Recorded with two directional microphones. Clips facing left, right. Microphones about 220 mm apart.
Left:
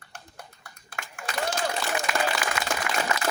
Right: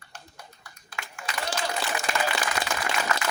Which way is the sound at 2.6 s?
40° right (ahead or behind).